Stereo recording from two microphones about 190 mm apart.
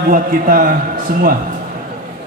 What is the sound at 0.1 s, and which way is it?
Speech, 50° right (ahead or behind).